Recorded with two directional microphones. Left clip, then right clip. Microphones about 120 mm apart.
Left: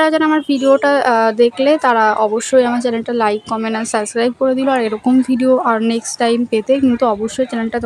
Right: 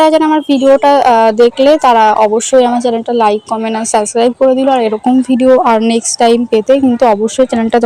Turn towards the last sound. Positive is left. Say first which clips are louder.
# right 9 dB
turn(degrees=-45)  # may be behind; listen again after turning